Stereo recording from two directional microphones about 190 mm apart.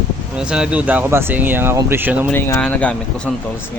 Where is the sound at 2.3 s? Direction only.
10° left (ahead or behind).